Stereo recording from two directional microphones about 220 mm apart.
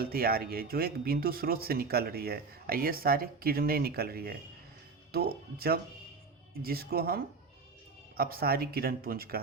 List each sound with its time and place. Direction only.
0.0 s speech: 45° right (ahead or behind)